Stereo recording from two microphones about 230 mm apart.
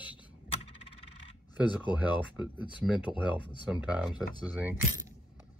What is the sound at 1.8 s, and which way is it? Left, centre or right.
Speech, centre.